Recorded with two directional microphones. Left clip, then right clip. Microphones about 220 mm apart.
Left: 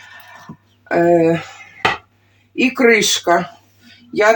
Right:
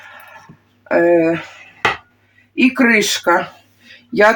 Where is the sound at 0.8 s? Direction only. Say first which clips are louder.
Even; 40° right (ahead or behind).